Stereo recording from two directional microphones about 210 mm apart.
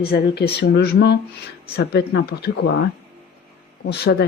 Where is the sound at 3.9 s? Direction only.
50° left (ahead or behind).